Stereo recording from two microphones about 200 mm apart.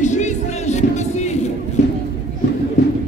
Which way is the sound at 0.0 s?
35° left (ahead or behind).